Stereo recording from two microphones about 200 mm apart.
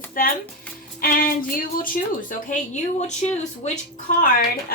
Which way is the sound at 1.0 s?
45° left (ahead or behind).